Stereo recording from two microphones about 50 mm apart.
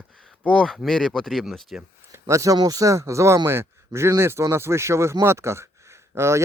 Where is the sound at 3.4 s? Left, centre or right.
Right.